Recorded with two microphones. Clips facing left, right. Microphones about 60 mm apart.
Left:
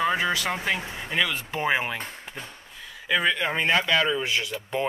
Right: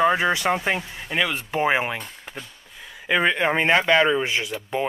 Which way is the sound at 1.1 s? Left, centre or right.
Centre.